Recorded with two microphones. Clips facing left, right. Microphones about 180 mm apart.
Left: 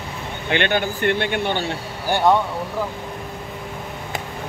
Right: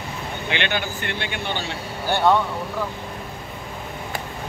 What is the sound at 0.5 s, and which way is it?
Speech, 50° left (ahead or behind).